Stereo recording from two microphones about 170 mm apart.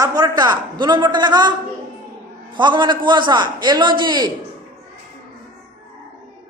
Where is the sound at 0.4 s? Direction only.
25° right (ahead or behind).